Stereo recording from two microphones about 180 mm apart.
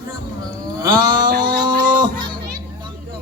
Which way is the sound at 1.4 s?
25° right (ahead or behind).